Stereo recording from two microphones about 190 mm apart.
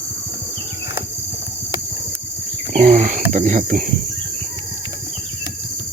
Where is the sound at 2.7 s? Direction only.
40° right (ahead or behind).